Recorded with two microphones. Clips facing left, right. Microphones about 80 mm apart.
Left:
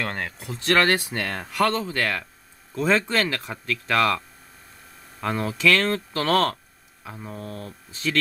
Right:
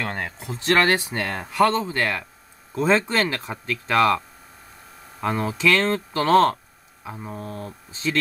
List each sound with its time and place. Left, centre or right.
0.0 s speech: centre
2.7 s speech: right
5.2 s speech: centre